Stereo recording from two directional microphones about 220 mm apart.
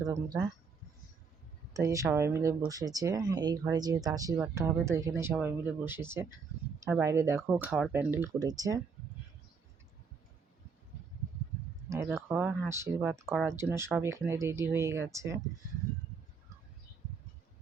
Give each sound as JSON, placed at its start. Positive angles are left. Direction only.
{"t": 0.0, "sound": "speech", "side_deg": -15}
{"t": 1.7, "sound": "speech", "side_deg": -15}
{"t": 12.0, "sound": "speech", "side_deg": -5}